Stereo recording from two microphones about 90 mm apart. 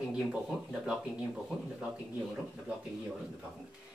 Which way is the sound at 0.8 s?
10° right (ahead or behind).